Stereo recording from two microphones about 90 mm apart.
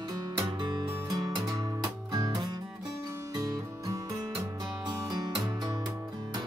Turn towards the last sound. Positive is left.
turn(degrees=-50)  # may be behind; listen again after turning